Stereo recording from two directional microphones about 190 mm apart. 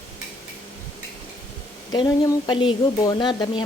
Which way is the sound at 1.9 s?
20° left (ahead or behind).